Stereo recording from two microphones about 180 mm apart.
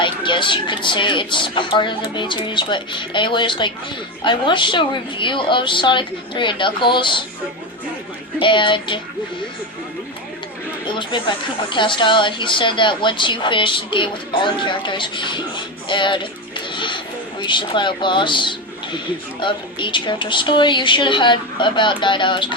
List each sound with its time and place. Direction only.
0.0 s a woman's voice: 25° left (ahead or behind)
8.4 s a woman's voice: 25° left (ahead or behind)
10.8 s a woman's voice: 25° left (ahead or behind)